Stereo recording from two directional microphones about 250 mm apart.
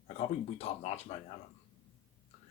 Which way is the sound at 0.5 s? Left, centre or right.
Left.